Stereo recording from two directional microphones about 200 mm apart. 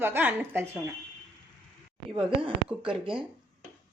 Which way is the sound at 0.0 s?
10° right (ahead or behind).